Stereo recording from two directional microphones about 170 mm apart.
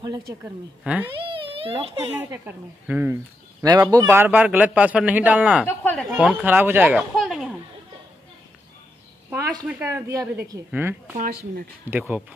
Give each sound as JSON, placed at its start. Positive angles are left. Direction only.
{"t": 0.0, "sound": "a woman's voice", "side_deg": -20}
{"t": 0.8, "sound": "a man's voice", "side_deg": -10}
{"t": 1.1, "sound": "a child's voice", "side_deg": -30}
{"t": 2.3, "sound": "a man's voice", "side_deg": -10}
{"t": 9.3, "sound": "a man's voice", "side_deg": -10}
{"t": 11.1, "sound": "speech", "side_deg": -60}
{"t": 12.0, "sound": "a man's voice", "side_deg": -5}